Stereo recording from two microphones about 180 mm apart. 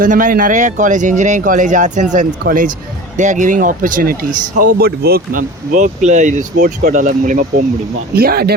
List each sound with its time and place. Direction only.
0.0 s speech: 50° right (ahead or behind)
8.1 s speech: 60° right (ahead or behind)